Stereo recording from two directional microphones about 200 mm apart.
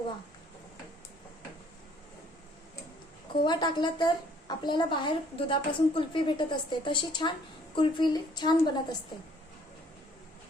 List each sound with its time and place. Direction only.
3.4 s a woman's voice: 20° left (ahead or behind)